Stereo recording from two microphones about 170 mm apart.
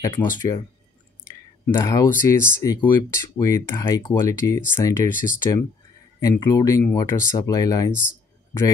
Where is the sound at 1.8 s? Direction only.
20° left (ahead or behind).